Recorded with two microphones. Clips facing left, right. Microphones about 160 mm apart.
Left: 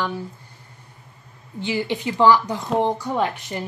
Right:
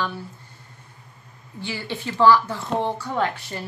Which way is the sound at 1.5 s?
20° left (ahead or behind).